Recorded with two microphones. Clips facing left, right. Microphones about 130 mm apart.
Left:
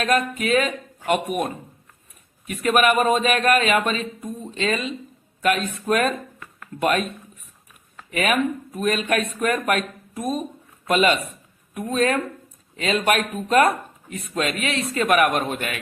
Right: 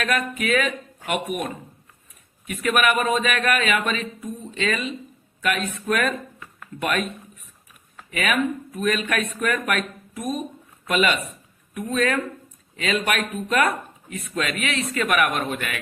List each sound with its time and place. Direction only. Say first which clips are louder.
0.0 s speech: left 3 dB; 35° left (ahead or behind)
8.1 s speech: left 2 dB; 35° left (ahead or behind)